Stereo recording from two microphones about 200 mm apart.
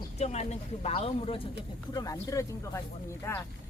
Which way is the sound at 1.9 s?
15° left (ahead or behind).